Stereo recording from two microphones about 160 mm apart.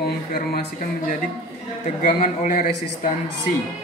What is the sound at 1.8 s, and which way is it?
Speech, 55° left (ahead or behind).